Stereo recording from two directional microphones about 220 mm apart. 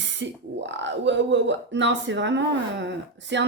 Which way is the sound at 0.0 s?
55° right (ahead or behind).